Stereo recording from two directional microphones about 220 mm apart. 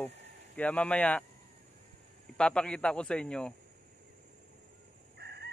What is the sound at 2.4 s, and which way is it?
Speech, 5° left (ahead or behind).